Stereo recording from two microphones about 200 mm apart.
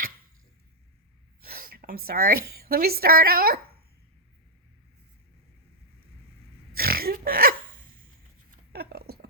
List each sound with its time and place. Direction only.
1.4 s a woman's voice: 50° right (ahead or behind)
6.7 s burping: 50° right (ahead or behind)
8.4 s a sound: 50° right (ahead or behind)